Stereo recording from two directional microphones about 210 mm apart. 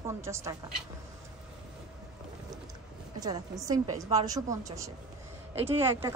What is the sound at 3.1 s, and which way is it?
A woman's voice, 20° right (ahead or behind).